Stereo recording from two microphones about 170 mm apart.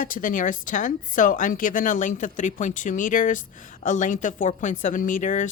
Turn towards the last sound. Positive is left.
turn(degrees=50)  # may be behind; listen again after turning